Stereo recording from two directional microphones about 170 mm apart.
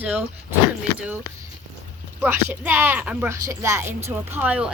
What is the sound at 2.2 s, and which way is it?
A woman's voice, 10° right (ahead or behind).